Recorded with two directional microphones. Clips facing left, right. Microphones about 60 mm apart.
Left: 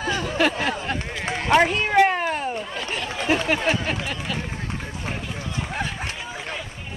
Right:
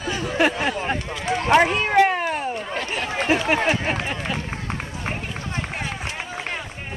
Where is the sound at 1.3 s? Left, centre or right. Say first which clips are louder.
Right 2 dB; right.